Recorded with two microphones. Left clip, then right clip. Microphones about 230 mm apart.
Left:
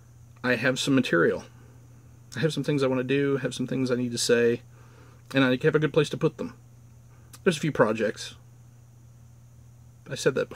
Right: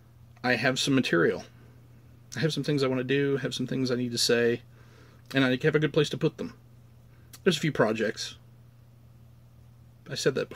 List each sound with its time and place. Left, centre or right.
0.4 s speech: centre
7.5 s speech: centre
10.0 s speech: centre